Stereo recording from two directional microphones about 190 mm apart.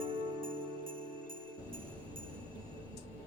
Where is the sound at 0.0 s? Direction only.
30° right (ahead or behind).